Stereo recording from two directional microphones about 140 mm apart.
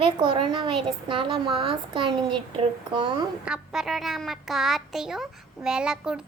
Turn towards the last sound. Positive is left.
turn(degrees=-5)  # may be behind; listen again after turning